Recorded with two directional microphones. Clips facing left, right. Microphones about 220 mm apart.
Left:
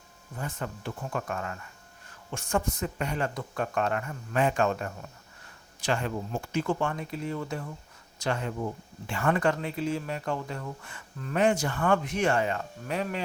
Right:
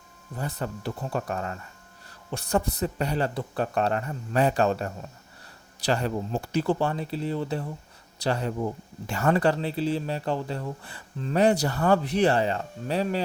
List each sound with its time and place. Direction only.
0.3 s speech: 35° right (ahead or behind)